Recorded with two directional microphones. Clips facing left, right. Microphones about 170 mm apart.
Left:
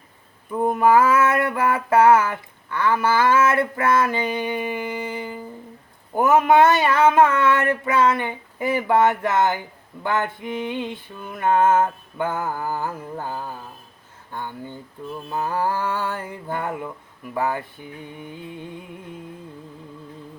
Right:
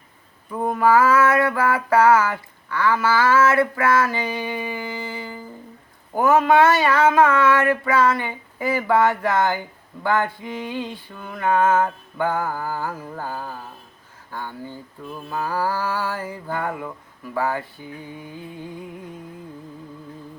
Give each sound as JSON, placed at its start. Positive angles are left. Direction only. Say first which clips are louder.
{"t": 0.6, "sound": "female singing", "louder": "left 1 dB", "side_deg": 20}
{"t": 17.3, "sound": "speech", "louder": "even", "side_deg": 15}